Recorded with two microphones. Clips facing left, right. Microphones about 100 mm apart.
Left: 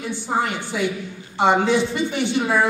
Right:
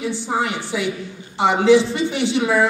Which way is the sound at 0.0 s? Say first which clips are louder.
Right 1 dB; 80° right.